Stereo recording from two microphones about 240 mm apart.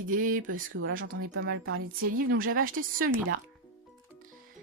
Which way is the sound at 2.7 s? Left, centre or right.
Right.